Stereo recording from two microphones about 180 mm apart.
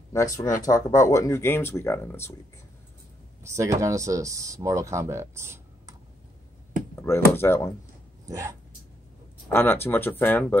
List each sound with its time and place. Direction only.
0.1 s speech: 15° left (ahead or behind)
3.4 s speech: 15° right (ahead or behind)
7.3 s speech: 15° left (ahead or behind)
8.3 s speech: 15° right (ahead or behind)
9.5 s speech: 10° left (ahead or behind)